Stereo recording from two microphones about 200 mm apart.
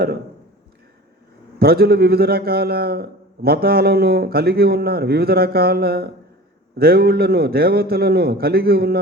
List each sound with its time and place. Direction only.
1.5 s a man's voice: 50° right (ahead or behind)